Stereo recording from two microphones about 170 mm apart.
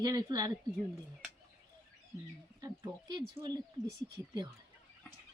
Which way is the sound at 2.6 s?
20° right (ahead or behind).